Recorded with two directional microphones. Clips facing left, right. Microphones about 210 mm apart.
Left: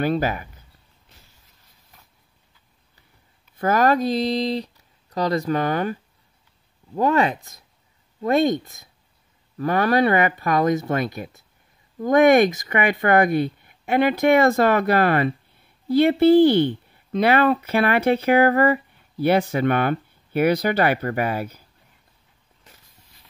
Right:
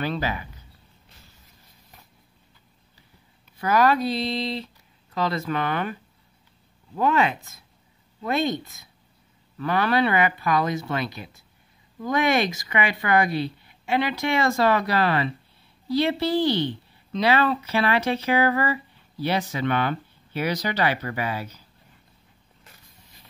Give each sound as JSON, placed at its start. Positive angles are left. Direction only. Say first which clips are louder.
{"t": 0.0, "sound": "speech", "louder": "left 6 dB", "side_deg": 50}
{"t": 3.5, "sound": "speech", "louder": "left 2 dB", "side_deg": 45}
{"t": 7.0, "sound": "speech", "louder": "left 3 dB", "side_deg": 40}